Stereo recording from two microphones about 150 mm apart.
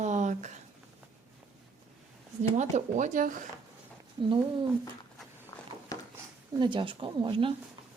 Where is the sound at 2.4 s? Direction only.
55° right (ahead or behind).